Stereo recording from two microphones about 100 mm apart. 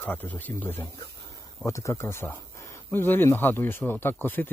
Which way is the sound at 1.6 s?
30° left (ahead or behind).